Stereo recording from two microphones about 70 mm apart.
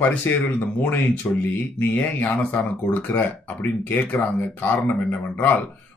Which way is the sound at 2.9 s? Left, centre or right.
Left.